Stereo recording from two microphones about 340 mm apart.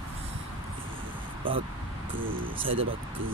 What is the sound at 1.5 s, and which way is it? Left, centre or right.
Speech, centre.